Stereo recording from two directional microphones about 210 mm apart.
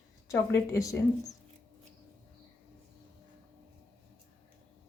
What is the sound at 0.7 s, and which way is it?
Speech, 15° left (ahead or behind).